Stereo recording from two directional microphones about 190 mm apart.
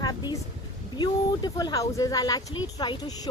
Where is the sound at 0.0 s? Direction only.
20° left (ahead or behind).